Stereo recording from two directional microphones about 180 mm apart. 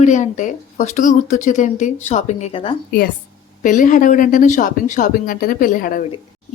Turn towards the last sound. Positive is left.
turn(degrees=50)  # may be behind; listen again after turning